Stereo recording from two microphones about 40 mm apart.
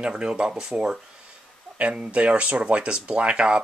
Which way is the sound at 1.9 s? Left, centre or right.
Right.